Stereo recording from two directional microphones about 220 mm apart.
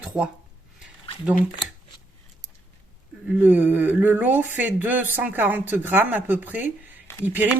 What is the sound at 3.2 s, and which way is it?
Speech, 10° right (ahead or behind).